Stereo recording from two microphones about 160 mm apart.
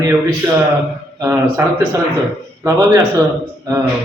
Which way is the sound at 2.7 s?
20° right (ahead or behind).